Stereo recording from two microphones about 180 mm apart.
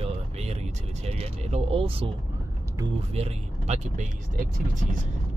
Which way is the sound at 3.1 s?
35° right (ahead or behind).